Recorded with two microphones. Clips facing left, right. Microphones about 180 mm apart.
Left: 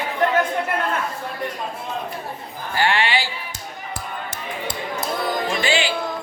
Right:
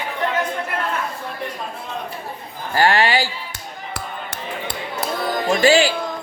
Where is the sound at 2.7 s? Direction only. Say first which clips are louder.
Right 4 dB; 40° right (ahead or behind).